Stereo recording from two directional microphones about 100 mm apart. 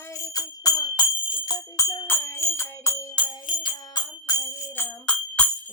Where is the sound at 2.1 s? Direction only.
25° left (ahead or behind).